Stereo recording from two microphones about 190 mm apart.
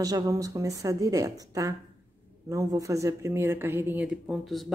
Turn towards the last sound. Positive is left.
turn(degrees=0)  # may be behind; listen again after turning